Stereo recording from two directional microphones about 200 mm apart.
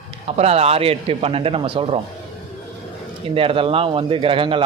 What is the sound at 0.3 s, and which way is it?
Speech, 30° right (ahead or behind).